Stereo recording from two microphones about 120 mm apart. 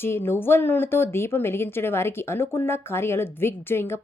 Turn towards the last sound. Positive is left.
turn(degrees=20)  # may be behind; listen again after turning